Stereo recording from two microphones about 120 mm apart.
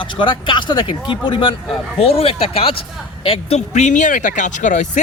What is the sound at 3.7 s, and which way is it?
Speech, 85° left.